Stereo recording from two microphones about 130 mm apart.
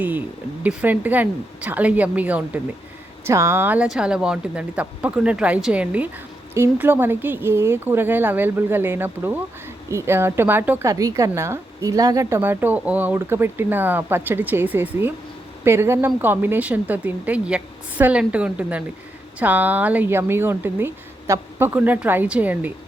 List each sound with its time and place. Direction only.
0.6 s speech: 10° right (ahead or behind)